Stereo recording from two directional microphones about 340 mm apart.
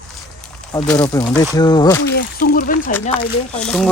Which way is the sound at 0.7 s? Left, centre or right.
Centre.